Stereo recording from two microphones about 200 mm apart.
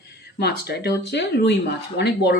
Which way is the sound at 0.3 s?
55° left (ahead or behind).